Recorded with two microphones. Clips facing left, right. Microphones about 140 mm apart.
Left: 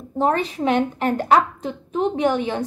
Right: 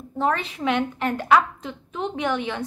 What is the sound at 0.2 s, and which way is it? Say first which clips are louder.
A woman's voice: left 4 dB; 40° left (ahead or behind).